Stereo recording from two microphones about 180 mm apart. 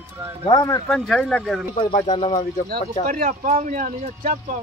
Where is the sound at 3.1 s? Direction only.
45° right (ahead or behind).